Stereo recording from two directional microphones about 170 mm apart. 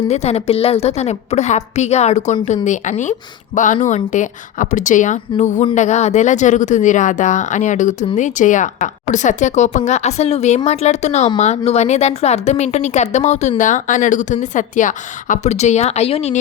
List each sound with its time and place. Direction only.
0.1 s a woman's voice: 35° left (ahead or behind)